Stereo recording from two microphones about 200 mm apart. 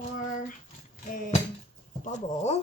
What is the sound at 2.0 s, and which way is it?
Speech, 35° left (ahead or behind).